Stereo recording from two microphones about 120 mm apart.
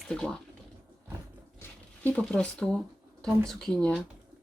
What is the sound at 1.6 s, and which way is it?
Zipper, 15° left (ahead or behind).